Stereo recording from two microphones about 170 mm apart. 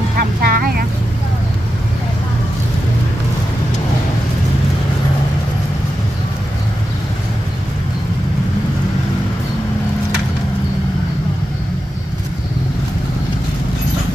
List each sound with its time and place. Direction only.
0.2 s vehicle: 60° right (ahead or behind)